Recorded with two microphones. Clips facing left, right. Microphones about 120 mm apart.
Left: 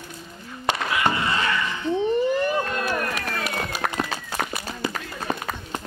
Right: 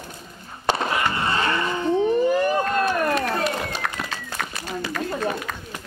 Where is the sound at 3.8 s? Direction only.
25° left (ahead or behind).